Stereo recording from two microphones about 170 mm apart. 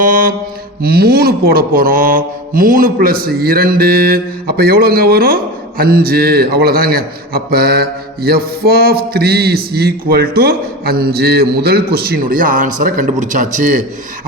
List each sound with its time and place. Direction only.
0.0 s mantra: 55° right (ahead or behind)
0.8 s speech: 65° right (ahead or behind)